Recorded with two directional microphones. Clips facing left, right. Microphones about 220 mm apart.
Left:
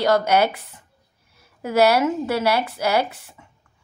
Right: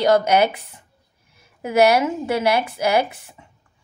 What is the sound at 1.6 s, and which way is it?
A woman's voice, 15° right (ahead or behind).